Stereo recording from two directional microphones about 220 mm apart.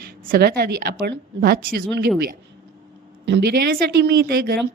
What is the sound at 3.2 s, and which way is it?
A woman's voice, 50° right (ahead or behind).